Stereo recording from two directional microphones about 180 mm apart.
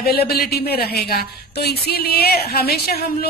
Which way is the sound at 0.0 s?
60° left (ahead or behind).